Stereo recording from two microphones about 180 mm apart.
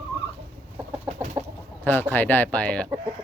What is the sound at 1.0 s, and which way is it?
Chicken, 35° right (ahead or behind).